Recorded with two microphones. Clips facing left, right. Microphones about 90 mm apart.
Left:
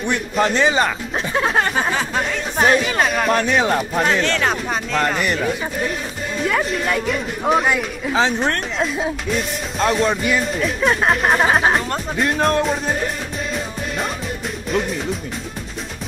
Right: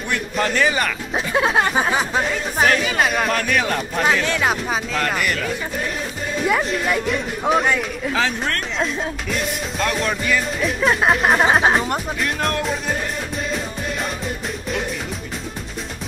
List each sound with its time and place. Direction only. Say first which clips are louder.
0.0 s a man's voice: left 3 dB; 20° left (ahead or behind)
1.1 s speech: right 2 dB; 5° right (ahead or behind)
3.3 s a man's voice: left 3 dB; 25° left (ahead or behind)
4.0 s speech: right 2 dB; 10° right (ahead or behind)
5.2 s a man's voice: left 2 dB; 25° left (ahead or behind)
6.4 s speech: even; 5° right (ahead or behind)
8.1 s a man's voice: left 5 dB; 30° left (ahead or behind)
8.7 s speech: left 2 dB; 5° left (ahead or behind)
9.8 s a man's voice: left 5 dB; 25° left (ahead or behind)
10.6 s speech: even; centre (ahead or behind)
12.2 s speech: left 9 dB; 30° left (ahead or behind)